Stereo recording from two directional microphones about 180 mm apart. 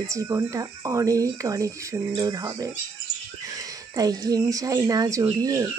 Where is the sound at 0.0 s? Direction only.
15° right (ahead or behind).